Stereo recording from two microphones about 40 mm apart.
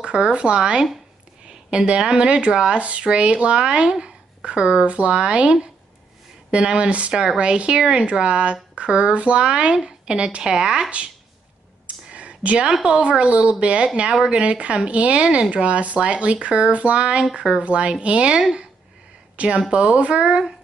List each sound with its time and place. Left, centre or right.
0.0 s speech: right
12.1 s a sound: right
12.8 s speech: right
17.2 s speech: right